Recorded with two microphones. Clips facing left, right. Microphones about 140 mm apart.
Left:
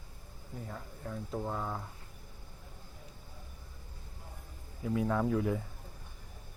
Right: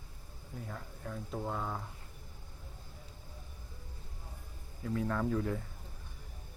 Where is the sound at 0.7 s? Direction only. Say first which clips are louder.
Left 1 dB; 5° left (ahead or behind).